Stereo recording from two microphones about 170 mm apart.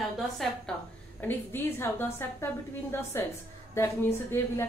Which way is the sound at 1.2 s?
10° left (ahead or behind).